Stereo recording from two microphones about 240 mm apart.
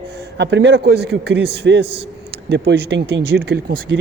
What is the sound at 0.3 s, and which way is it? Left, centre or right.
A man's voice, right.